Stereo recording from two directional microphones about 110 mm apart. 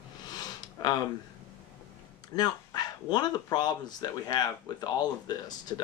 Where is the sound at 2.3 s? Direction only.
40° left (ahead or behind).